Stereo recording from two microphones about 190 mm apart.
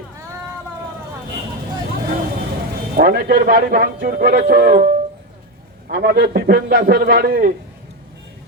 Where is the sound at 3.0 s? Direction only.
50° right (ahead or behind).